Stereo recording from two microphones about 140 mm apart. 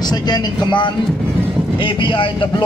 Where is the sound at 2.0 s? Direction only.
40° left (ahead or behind).